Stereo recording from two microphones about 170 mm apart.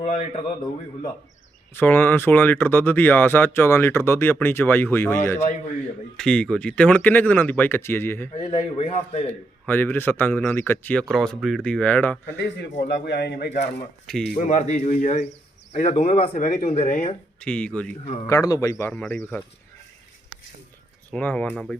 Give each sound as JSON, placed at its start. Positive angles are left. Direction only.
{"t": 0.0, "sound": "a man's voice", "side_deg": 50}
{"t": 1.7, "sound": "speech", "side_deg": 10}
{"t": 8.4, "sound": "speech", "side_deg": 40}
{"t": 9.6, "sound": "speech", "side_deg": 10}
{"t": 12.4, "sound": "a man's voice", "side_deg": 90}
{"t": 12.8, "sound": "a man's voice", "side_deg": 80}
{"t": 14.3, "sound": "speech", "side_deg": 45}
{"t": 17.4, "sound": "speech", "side_deg": 5}
{"t": 18.3, "sound": "a man's voice", "side_deg": 20}
{"t": 18.9, "sound": "speech", "side_deg": 5}
{"t": 21.1, "sound": "speech", "side_deg": 10}